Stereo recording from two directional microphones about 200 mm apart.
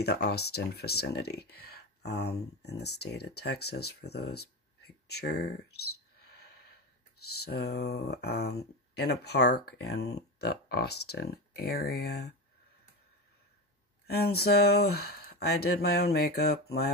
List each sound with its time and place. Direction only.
0.0 s speech: 55° left (ahead or behind)
7.2 s speech: 55° left (ahead or behind)
14.0 s speech: 50° left (ahead or behind)